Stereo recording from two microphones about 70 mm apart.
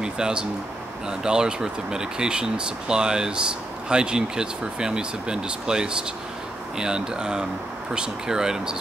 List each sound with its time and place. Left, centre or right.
0.0 s speech: centre